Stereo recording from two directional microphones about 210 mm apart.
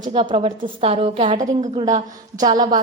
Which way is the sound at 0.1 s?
25° right (ahead or behind).